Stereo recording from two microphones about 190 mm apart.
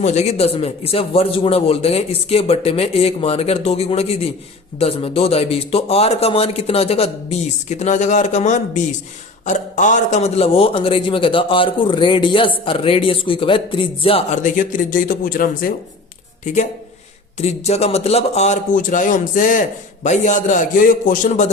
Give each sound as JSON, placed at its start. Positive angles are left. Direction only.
{"t": 0.0, "sound": "a man's voice", "side_deg": 35}
{"t": 17.4, "sound": "a man's voice", "side_deg": 35}